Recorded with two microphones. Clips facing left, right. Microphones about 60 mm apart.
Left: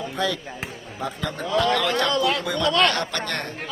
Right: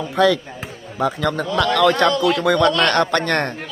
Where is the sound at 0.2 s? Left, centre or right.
Right.